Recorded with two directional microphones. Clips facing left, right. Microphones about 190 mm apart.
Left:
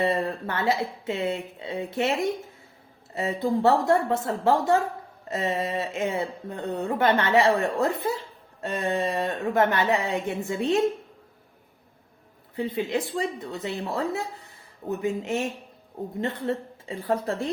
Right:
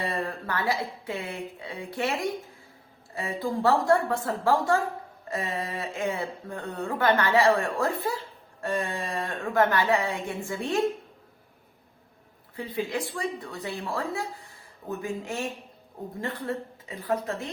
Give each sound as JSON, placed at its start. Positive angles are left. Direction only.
{"t": 0.0, "sound": "speech", "side_deg": 25}
{"t": 12.5, "sound": "speech", "side_deg": 25}